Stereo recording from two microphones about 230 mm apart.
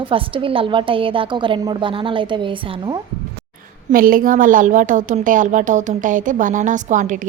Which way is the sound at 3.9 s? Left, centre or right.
Right.